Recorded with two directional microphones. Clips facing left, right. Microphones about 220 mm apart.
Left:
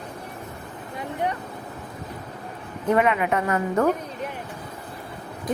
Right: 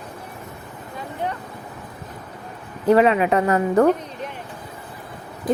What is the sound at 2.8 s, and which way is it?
A woman's voice, 30° right (ahead or behind).